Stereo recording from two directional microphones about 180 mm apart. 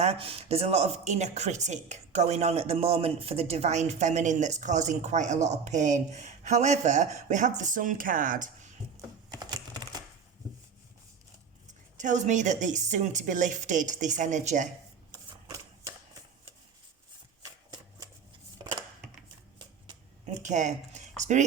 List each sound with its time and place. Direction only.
0.0 s speech: 35° right (ahead or behind)
9.3 s typing: 20° right (ahead or behind)
11.9 s a woman's voice: 40° right (ahead or behind)
20.2 s speech: 40° right (ahead or behind)